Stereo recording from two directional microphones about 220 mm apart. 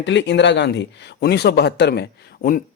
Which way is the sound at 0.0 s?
55° left (ahead or behind).